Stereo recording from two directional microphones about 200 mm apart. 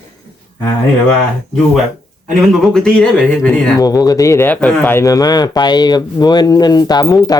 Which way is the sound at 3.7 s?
20° left (ahead or behind).